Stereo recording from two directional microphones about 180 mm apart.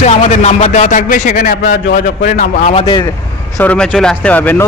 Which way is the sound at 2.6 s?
30° left (ahead or behind).